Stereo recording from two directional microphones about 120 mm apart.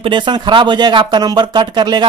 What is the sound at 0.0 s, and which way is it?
Speech, 40° right (ahead or behind).